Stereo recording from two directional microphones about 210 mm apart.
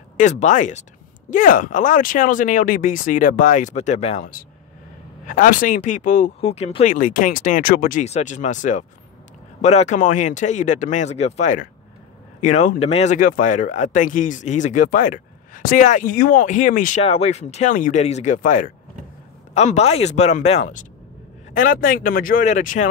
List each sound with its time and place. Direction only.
0.2 s speech: 35° left (ahead or behind)